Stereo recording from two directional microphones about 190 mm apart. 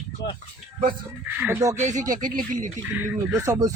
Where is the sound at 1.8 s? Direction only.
40° right (ahead or behind).